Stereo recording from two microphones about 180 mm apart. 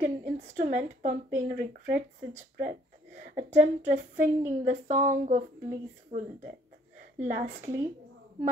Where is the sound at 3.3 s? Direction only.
40° right (ahead or behind).